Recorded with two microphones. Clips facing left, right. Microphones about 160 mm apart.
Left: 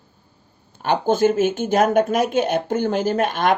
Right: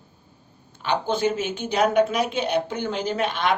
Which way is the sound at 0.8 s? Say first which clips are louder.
Left 6 dB; 45° left (ahead or behind).